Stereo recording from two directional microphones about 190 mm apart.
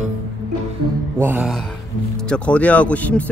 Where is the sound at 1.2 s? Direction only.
10° right (ahead or behind).